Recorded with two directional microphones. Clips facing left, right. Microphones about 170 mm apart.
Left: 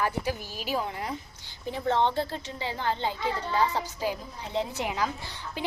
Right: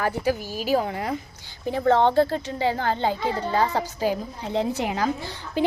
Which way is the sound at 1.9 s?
45° right (ahead or behind).